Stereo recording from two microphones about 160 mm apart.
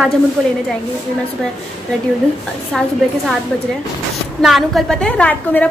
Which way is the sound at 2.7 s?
Centre (ahead or behind).